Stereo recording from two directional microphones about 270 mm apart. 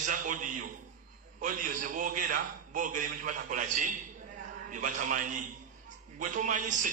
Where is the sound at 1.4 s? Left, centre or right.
Right.